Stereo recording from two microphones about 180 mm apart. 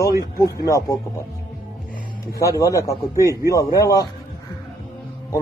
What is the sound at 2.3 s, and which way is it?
A man's voice, 20° left (ahead or behind).